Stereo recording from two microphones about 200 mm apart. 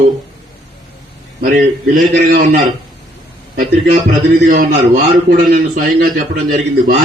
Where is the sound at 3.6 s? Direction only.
40° right (ahead or behind).